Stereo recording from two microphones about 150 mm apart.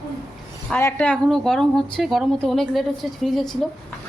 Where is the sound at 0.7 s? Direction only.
10° left (ahead or behind).